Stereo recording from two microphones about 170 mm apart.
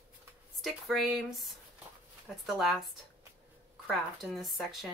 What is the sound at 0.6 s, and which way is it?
Speech, centre (ahead or behind).